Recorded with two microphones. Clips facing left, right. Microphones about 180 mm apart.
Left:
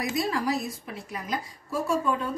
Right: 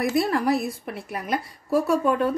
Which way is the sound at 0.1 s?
60° right (ahead or behind).